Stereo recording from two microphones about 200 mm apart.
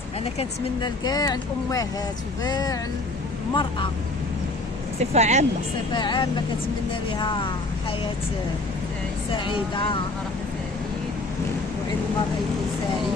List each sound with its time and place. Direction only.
0.3 s speech: 20° left (ahead or behind)
4.9 s speech: 35° right (ahead or behind)
5.9 s speech: 20° left (ahead or behind)
9.3 s speech: 25° left (ahead or behind)